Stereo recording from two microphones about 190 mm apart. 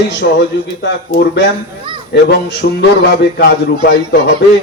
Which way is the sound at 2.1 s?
60° left (ahead or behind).